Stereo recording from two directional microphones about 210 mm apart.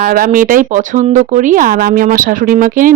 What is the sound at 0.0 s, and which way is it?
Speech, 45° right (ahead or behind).